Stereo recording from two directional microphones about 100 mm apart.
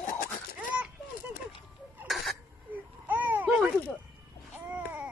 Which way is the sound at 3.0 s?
20° right (ahead or behind).